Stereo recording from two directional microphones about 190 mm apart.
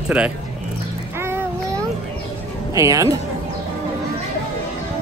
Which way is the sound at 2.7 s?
15° right (ahead or behind).